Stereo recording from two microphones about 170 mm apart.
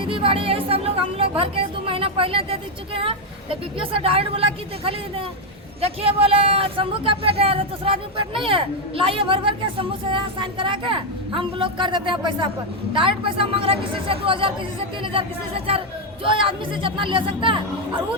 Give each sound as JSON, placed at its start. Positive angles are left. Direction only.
{"t": 0.0, "sound": "speech", "side_deg": -30}